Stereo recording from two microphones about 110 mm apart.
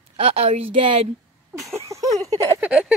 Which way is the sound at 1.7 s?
30° right (ahead or behind).